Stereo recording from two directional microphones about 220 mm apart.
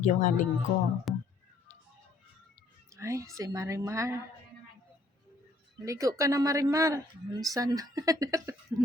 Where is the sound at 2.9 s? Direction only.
15° right (ahead or behind).